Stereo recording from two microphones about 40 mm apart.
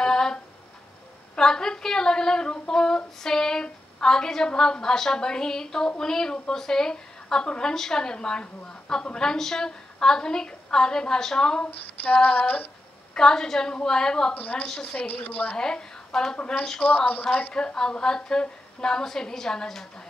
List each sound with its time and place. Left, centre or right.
0.0 s a sound: centre
1.3 s a woman's voice: centre
11.6 s female singing: left
13.1 s a woman's voice: centre
14.3 s a woman's voice: left
14.7 s a woman's voice: centre
15.0 s a woman's voice: left
15.5 s a woman's voice: centre
16.8 s a woman's voice: left
17.6 s a woman's voice: centre